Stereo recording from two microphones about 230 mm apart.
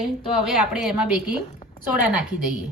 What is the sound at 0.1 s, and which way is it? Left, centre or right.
A woman's voice, centre.